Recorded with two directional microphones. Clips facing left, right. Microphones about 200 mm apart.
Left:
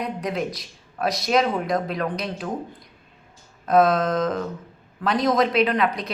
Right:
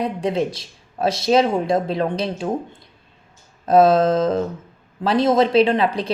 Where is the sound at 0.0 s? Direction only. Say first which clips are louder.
Right 5 dB; 30° right (ahead or behind).